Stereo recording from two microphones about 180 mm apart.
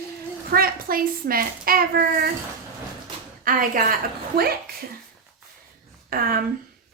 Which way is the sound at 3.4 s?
50° right (ahead or behind).